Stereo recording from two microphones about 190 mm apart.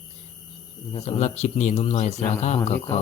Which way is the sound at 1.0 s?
35° left (ahead or behind).